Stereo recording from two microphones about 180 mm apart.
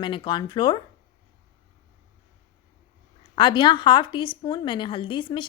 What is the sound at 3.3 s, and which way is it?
Speech, 25° left (ahead or behind).